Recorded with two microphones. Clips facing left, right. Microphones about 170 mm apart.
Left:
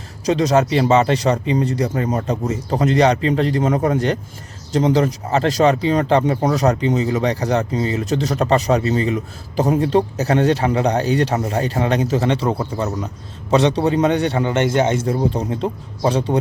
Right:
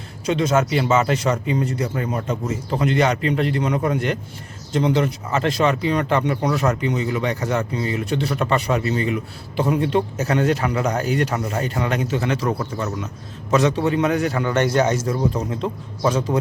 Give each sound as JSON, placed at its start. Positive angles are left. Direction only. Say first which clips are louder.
{"t": 0.3, "sound": "a man's voice", "louder": "left 3 dB", "side_deg": 35}